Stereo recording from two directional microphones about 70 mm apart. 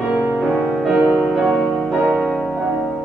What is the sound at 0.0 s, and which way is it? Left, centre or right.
Music, centre.